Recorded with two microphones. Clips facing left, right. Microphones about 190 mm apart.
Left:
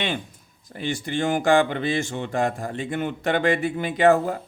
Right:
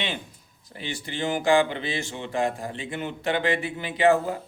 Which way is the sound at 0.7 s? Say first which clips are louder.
Left 7 dB; 50° left (ahead or behind).